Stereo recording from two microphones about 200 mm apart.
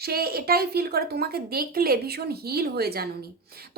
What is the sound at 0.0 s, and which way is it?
Speech, 50° right (ahead or behind).